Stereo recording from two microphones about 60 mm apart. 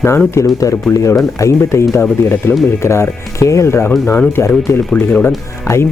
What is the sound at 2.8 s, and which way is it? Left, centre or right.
Speech, left.